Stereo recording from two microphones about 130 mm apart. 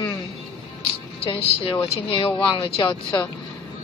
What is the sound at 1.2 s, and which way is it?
Speech, 45° left (ahead or behind).